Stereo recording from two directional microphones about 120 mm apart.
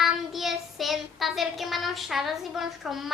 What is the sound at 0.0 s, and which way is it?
Child singing, 5° right (ahead or behind).